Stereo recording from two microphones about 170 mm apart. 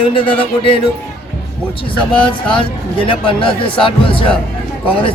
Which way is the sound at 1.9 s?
30° left (ahead or behind).